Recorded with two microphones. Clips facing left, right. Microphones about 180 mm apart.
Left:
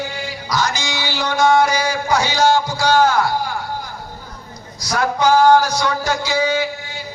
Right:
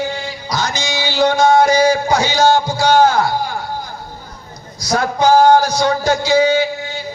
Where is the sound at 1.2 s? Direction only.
30° right (ahead or behind).